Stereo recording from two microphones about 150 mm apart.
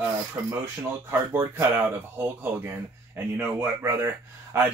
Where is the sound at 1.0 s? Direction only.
15° right (ahead or behind).